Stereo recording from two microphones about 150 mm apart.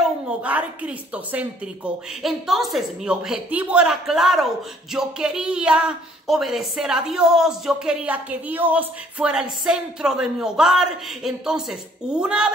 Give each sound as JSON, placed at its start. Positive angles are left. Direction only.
{"t": 0.0, "sound": "a woman's voice", "side_deg": -5}